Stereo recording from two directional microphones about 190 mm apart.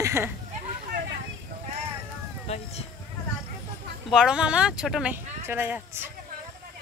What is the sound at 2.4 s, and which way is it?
Speech, 35° left (ahead or behind).